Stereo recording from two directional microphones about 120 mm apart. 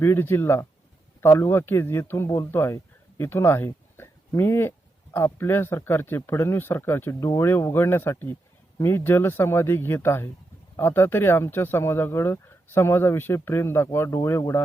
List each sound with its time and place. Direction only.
0.0 s a man's voice: 20° left (ahead or behind)